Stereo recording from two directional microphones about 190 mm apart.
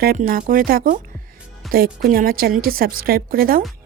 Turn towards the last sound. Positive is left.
turn(degrees=-50)  # may be behind; listen again after turning